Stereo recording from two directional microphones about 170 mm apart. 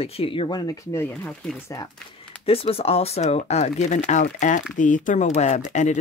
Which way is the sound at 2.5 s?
35° left (ahead or behind).